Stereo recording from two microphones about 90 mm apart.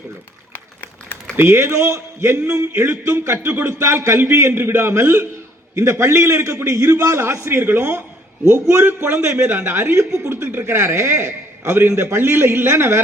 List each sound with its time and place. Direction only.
0.5 s a sound: 20° left (ahead or behind)
1.4 s a man's voice: 25° right (ahead or behind)
9.4 s a man's voice: 15° right (ahead or behind)
10.1 s a man's voice: 30° right (ahead or behind)